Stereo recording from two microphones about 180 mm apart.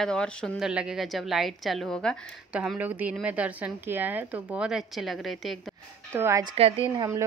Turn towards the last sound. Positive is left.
turn(degrees=-15)  # may be behind; listen again after turning